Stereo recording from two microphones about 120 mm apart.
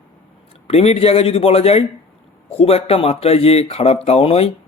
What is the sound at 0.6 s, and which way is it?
Speech, 60° left (ahead or behind).